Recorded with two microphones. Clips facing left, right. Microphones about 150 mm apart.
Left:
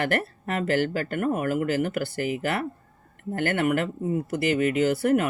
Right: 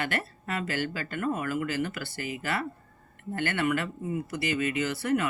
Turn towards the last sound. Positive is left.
turn(degrees=50)  # may be behind; listen again after turning